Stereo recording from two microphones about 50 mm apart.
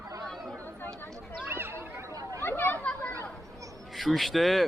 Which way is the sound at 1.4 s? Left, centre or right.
Right.